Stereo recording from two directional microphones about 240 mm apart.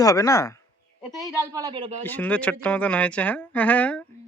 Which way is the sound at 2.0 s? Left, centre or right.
Centre.